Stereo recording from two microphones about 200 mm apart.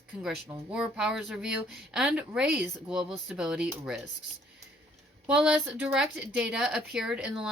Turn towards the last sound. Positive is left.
turn(degrees=-5)  # may be behind; listen again after turning